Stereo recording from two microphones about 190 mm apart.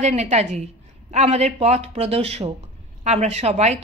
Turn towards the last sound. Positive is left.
turn(degrees=-35)  # may be behind; listen again after turning